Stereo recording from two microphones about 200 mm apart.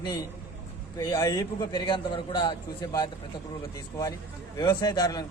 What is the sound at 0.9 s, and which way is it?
A man's voice, 15° left (ahead or behind).